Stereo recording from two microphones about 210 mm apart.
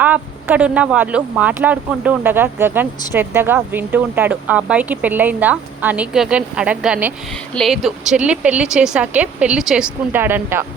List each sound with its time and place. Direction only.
0.0 s speech: 10° right (ahead or behind)